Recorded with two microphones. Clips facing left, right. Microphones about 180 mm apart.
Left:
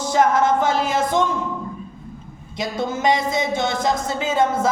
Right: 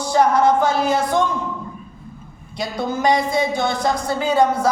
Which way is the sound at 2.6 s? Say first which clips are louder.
Right 1 dB; 20° left (ahead or behind).